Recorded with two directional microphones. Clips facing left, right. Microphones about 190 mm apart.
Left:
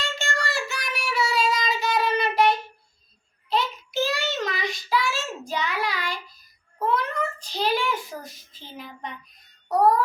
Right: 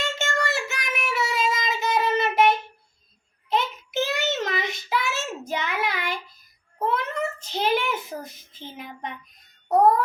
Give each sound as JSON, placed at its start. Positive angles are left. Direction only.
{"t": 0.0, "sound": "child singing", "side_deg": -20}
{"t": 6.7, "sound": "a sound", "side_deg": -20}
{"t": 9.6, "sound": "music", "side_deg": -20}